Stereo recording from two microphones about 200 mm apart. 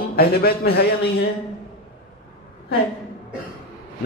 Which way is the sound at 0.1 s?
50° left (ahead or behind).